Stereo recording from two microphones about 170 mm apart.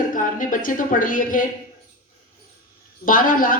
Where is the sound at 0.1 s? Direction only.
50° left (ahead or behind).